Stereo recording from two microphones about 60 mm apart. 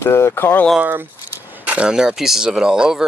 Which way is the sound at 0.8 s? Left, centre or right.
Right.